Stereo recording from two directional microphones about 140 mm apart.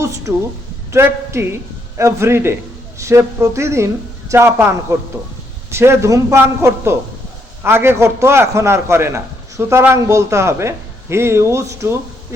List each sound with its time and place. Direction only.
0.9 s a man's voice: 20° right (ahead or behind)